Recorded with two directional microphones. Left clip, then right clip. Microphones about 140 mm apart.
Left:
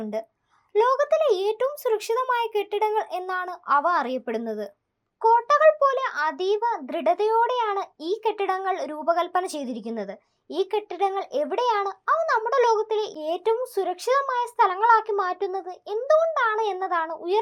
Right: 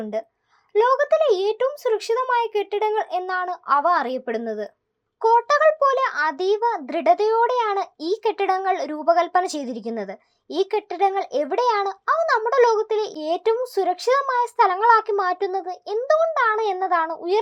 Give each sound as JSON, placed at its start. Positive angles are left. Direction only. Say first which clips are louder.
{"t": 0.0, "sound": "speech", "louder": "right 3 dB", "side_deg": 50}
{"t": 5.2, "sound": "a child's voice", "louder": "right 1 dB", "side_deg": 25}